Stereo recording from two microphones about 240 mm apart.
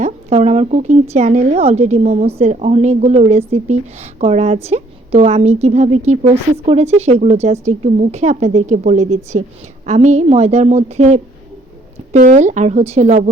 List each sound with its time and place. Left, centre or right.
0.0 s speech: right